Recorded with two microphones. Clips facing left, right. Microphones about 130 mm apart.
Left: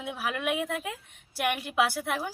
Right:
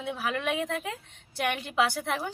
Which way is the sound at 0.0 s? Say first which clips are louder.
Right 1 dB; 5° left (ahead or behind).